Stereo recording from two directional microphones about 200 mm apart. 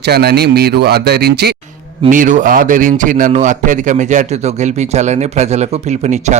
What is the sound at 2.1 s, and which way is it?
Speech, 40° right (ahead or behind).